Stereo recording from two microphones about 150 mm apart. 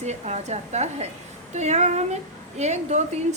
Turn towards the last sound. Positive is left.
turn(degrees=-50)  # may be behind; listen again after turning